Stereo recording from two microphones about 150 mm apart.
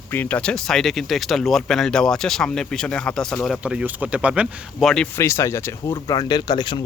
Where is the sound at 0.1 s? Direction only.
10° left (ahead or behind).